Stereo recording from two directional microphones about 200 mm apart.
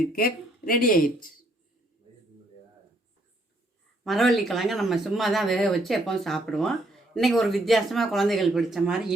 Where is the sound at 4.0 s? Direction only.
Centre (ahead or behind).